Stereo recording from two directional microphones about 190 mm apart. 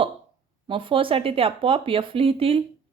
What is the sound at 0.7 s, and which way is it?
Speech, 25° right (ahead or behind).